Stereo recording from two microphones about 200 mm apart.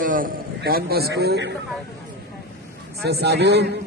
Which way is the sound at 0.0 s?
45° right (ahead or behind).